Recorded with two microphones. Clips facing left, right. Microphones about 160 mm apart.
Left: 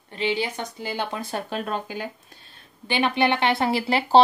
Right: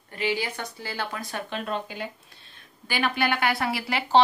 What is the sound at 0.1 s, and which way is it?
Speech, 25° left (ahead or behind).